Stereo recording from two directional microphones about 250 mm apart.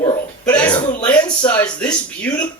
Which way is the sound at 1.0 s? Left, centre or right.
Centre.